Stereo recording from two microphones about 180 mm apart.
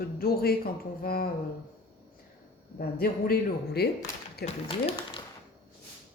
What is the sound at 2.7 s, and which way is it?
Speech, 55° left (ahead or behind).